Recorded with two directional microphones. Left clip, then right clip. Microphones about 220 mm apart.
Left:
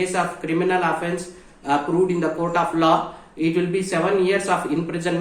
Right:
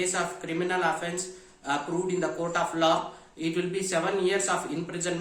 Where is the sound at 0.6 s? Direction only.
15° right (ahead or behind).